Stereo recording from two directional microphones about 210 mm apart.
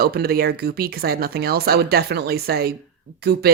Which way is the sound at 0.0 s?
45° right (ahead or behind).